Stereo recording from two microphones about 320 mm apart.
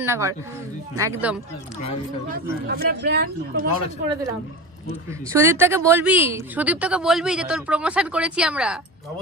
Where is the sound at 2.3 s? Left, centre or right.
Right.